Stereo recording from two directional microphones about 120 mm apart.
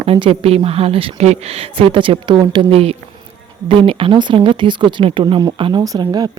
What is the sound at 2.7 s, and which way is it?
Speech, 55° right (ahead or behind).